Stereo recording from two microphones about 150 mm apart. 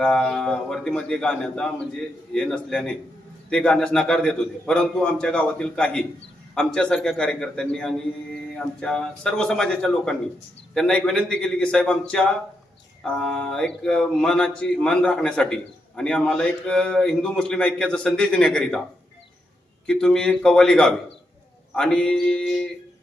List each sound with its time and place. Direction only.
0.0 s a man's voice: 5° left (ahead or behind)
19.9 s a man's voice: 5° left (ahead or behind)